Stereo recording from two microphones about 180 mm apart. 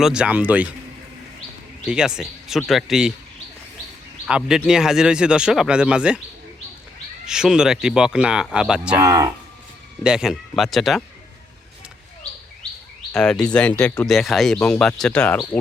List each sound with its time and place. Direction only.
0.0 s speech: 5° right (ahead or behind)
1.9 s speech: 5° right (ahead or behind)
4.3 s speech: 5° right (ahead or behind)
7.3 s speech: 5° right (ahead or behind)
9.0 s speech: 20° right (ahead or behind)
10.0 s speech: 5° right (ahead or behind)
13.1 s speech: 5° left (ahead or behind)